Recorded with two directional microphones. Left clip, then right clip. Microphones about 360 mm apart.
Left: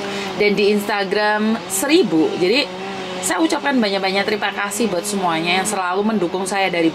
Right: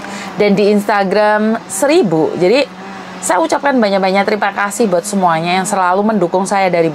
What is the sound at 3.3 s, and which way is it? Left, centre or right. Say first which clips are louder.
Speech: right 6 dB; right.